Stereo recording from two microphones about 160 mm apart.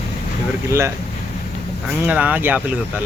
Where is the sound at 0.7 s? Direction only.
15° right (ahead or behind).